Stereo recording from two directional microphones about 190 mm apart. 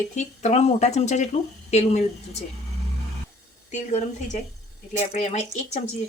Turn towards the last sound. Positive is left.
turn(degrees=40)  # may be behind; listen again after turning